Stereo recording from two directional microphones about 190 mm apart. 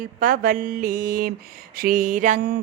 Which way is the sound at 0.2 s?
50° right (ahead or behind).